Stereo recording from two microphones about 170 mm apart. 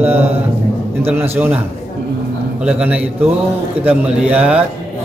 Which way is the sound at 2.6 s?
5° right (ahead or behind).